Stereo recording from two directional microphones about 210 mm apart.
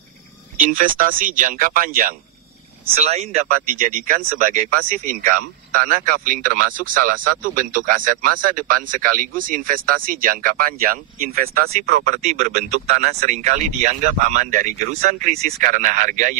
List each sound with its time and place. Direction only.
0.7 s speech: 40° right (ahead or behind)
2.8 s speech: 30° right (ahead or behind)
3.5 s speech: 40° right (ahead or behind)
12.2 s speech: 35° right (ahead or behind)